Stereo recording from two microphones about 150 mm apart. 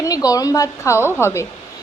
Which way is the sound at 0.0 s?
25° left (ahead or behind).